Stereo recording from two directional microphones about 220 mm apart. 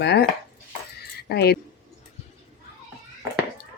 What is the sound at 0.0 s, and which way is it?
Cutlery, 50° left (ahead or behind).